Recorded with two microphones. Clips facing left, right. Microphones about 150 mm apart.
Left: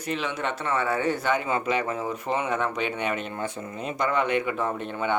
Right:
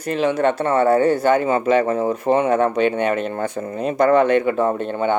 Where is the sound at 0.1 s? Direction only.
40° right (ahead or behind).